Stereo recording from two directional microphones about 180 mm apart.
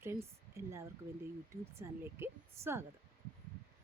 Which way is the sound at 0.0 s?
15° right (ahead or behind).